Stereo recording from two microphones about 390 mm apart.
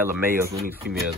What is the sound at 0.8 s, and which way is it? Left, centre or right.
Speech, right.